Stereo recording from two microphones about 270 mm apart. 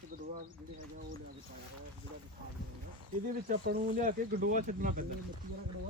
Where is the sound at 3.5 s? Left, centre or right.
Right.